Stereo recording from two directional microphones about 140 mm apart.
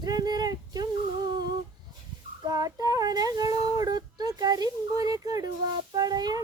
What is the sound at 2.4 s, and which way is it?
Child singing, 25° right (ahead or behind).